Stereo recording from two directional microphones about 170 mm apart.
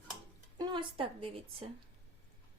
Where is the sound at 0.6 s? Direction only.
30° right (ahead or behind).